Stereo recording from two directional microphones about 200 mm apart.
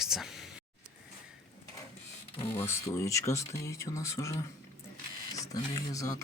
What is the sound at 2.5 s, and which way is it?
Speech, 10° left (ahead or behind).